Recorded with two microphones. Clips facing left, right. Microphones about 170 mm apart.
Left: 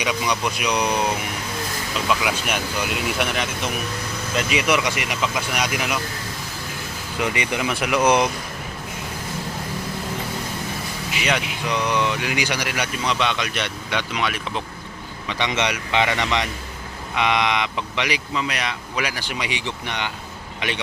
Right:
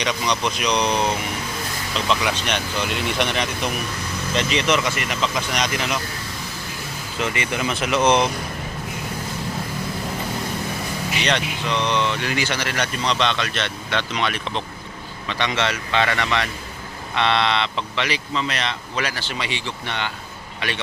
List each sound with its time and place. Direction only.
0.0 s speech: 10° left (ahead or behind)
7.2 s speech: 15° left (ahead or behind)
11.2 s speech: 10° left (ahead or behind)